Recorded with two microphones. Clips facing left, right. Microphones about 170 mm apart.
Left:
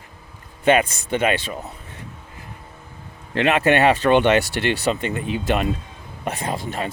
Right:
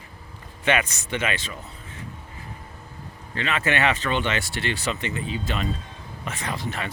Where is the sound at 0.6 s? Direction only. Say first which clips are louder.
Left 7 dB; 50° left (ahead or behind).